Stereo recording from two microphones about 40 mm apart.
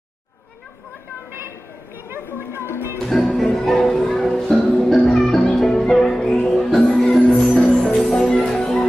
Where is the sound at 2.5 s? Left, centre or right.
Left.